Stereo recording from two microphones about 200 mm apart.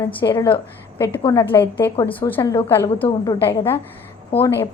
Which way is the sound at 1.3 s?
15° left (ahead or behind).